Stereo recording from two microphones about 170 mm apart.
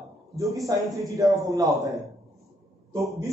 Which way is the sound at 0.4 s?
20° right (ahead or behind).